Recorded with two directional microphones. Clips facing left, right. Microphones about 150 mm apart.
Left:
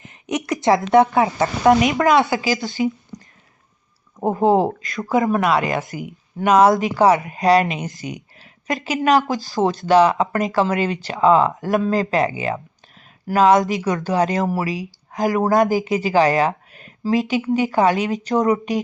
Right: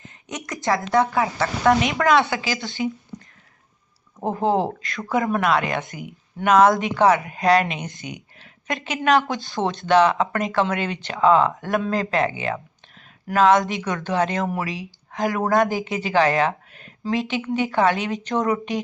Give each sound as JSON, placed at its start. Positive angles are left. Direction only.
{"t": 0.0, "sound": "speech", "side_deg": 20}
{"t": 2.0, "sound": "speech", "side_deg": 0}
{"t": 4.2, "sound": "speech", "side_deg": 20}
{"t": 4.4, "sound": "speech", "side_deg": 40}
{"t": 5.3, "sound": "speech", "side_deg": 5}